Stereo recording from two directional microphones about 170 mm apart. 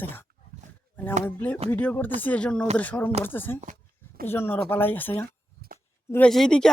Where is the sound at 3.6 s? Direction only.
55° right (ahead or behind).